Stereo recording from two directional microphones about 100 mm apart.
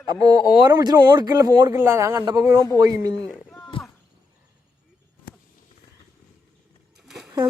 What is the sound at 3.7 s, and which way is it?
Cricket, 65° left (ahead or behind).